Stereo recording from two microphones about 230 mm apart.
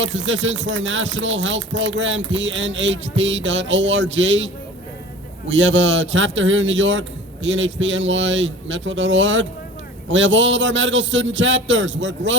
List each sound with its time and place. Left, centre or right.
0.0 s speech: right